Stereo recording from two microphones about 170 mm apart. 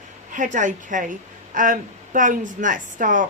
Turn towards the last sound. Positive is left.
turn(degrees=-50)  # may be behind; listen again after turning